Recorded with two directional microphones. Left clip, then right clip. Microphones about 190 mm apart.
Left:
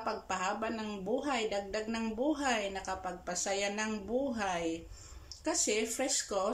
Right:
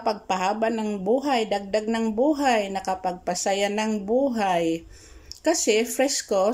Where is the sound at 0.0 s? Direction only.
45° right (ahead or behind).